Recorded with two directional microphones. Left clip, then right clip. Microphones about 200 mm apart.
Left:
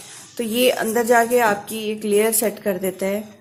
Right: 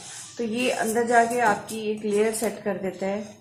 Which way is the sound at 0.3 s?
55° left (ahead or behind).